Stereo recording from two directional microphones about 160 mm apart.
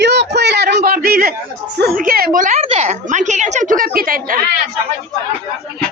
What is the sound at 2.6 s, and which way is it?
A woman's voice, 40° right (ahead or behind).